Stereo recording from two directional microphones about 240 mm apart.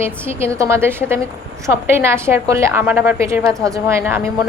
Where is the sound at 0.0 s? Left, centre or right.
Centre.